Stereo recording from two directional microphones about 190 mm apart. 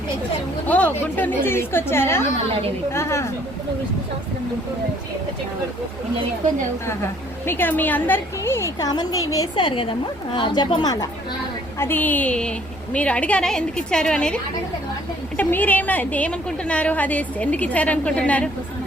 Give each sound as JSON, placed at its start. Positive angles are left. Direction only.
{"t": 0.7, "sound": "a woman's voice", "side_deg": 10}
{"t": 7.4, "sound": "a woman's voice", "side_deg": 10}
{"t": 11.8, "sound": "a woman's voice", "side_deg": 10}
{"t": 15.4, "sound": "a woman's voice", "side_deg": 10}